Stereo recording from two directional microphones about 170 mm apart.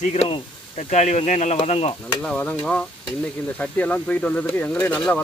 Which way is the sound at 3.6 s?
5° left (ahead or behind).